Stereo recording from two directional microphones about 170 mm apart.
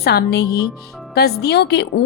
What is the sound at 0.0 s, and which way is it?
A woman's voice, 70° left (ahead or behind).